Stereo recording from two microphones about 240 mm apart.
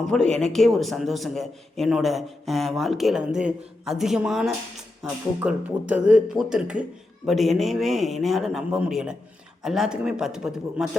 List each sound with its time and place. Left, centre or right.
0.1 s a man's voice: centre